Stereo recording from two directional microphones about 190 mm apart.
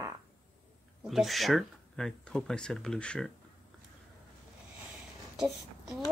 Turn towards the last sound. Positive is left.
turn(degrees=0)  # may be behind; listen again after turning